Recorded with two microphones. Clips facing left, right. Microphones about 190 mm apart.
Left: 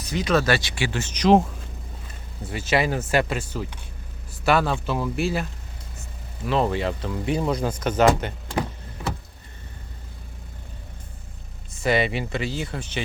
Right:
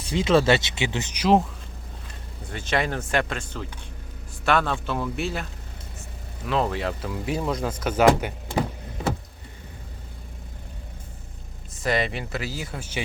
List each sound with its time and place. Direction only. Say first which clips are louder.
0.0 s speech: right 2 dB; 25° right (ahead or behind)
2.5 s speech: left 3 dB; 5° left (ahead or behind); by 8.6 s 10° right (ahead or behind)
11.8 s speech: left 3 dB; centre (ahead or behind)